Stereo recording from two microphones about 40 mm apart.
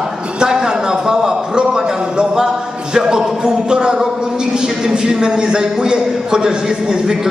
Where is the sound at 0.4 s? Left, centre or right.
Centre.